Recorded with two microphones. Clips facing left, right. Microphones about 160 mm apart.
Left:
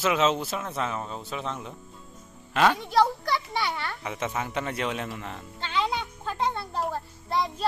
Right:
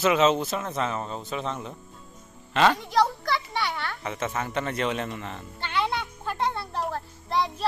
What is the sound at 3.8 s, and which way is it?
Music, centre (ahead or behind).